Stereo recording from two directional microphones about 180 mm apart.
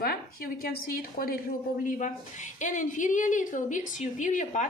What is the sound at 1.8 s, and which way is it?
A woman's voice, 45° left (ahead or behind).